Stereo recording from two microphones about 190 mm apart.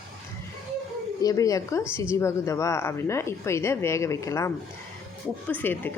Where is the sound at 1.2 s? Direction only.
20° left (ahead or behind).